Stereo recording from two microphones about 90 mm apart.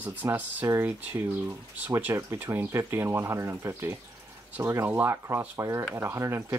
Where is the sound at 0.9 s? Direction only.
20° right (ahead or behind).